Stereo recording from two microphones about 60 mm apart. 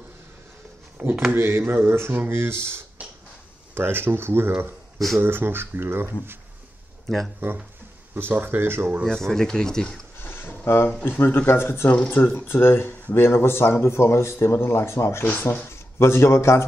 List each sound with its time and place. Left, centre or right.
1.0 s speech: right
1.3 s speech: right
8.1 s speech: right
9.0 s speech: centre
10.1 s a sound: left
11.1 s speech: left
15.2 s a man's voice: left